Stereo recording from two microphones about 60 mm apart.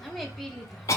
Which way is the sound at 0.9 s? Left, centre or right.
Left.